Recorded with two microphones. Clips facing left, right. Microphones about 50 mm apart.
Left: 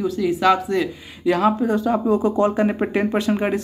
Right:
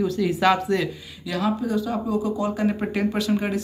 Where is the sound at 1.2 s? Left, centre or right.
Left.